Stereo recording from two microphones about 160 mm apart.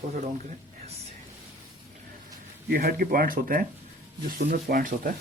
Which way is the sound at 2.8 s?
65° right (ahead or behind).